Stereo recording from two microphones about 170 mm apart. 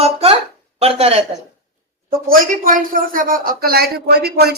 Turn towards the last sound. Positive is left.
turn(degrees=-65)  # may be behind; listen again after turning